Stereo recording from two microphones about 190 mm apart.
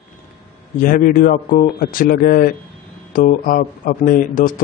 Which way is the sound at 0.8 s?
50° left (ahead or behind).